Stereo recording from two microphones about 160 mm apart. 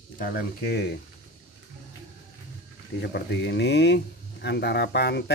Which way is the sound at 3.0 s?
90° left.